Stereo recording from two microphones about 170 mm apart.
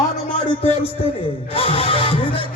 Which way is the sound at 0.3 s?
35° left (ahead or behind).